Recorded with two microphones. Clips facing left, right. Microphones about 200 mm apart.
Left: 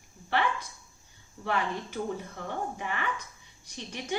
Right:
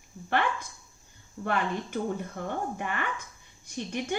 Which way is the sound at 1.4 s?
50° right (ahead or behind).